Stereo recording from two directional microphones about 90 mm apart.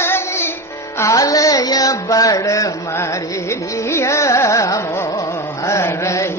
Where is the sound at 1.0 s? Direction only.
40° left (ahead or behind).